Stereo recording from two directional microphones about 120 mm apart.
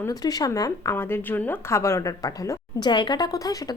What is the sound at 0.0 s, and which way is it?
A woman's voice, 30° left (ahead or behind).